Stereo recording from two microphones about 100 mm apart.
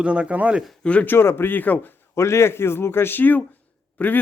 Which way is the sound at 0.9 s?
15° left (ahead or behind).